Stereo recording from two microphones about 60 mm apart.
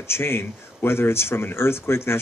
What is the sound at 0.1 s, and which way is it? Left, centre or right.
A man's voice, left.